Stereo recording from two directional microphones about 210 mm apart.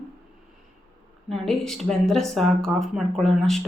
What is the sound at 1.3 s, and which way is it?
Speech, centre (ahead or behind).